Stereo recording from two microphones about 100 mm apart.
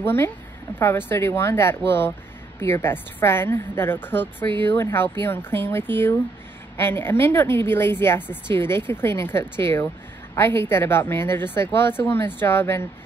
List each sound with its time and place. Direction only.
0.0 s a woman's voice: 25° left (ahead or behind)